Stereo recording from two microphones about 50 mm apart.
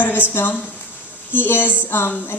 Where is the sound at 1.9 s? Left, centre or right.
Left.